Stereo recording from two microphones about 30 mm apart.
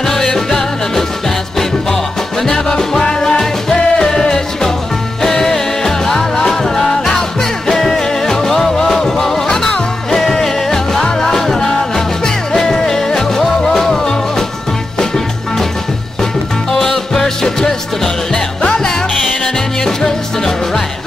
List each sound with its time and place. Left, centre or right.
0.0 s music: centre
3.0 s music: left
16.7 s music: centre
19.4 s music: centre